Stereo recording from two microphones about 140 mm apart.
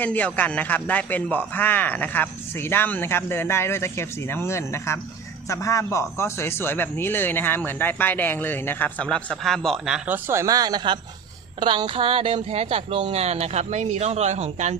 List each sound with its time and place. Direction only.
0.0 s a man's voice: 10° left (ahead or behind); by 10.2 s 5° right (ahead or behind)
10.2 s speech: 20° right (ahead or behind); by 14.8 s 55° right (ahead or behind)